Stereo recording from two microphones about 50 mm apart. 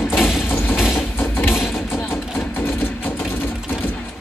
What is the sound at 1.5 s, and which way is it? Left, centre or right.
Vehicle, centre.